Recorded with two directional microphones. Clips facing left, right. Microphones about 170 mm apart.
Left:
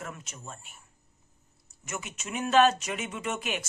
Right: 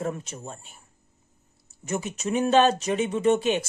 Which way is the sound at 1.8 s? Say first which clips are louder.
Right 10 dB; 35° right (ahead or behind).